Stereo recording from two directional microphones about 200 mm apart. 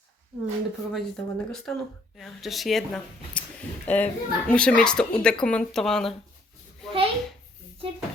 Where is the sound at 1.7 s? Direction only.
5° left (ahead or behind).